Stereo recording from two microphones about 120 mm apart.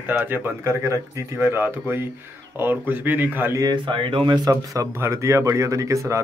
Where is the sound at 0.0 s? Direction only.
15° right (ahead or behind).